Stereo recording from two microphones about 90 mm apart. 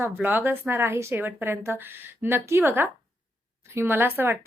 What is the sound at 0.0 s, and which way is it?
A woman's voice, 20° right (ahead or behind).